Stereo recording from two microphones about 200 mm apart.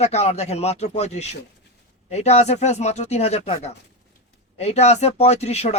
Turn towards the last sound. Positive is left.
turn(degrees=30)  # may be behind; listen again after turning